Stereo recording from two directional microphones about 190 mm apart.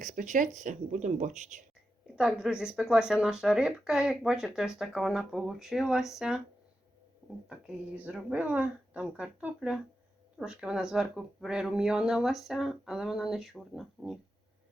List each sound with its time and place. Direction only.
0.0 s speech: 40° right (ahead or behind)
2.1 s speech: 5° right (ahead or behind)
7.4 s speech: 5° right (ahead or behind)